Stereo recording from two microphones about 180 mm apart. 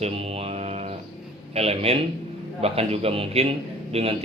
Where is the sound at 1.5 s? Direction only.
35° right (ahead or behind).